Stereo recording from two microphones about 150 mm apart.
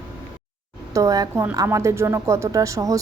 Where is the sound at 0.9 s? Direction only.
25° right (ahead or behind).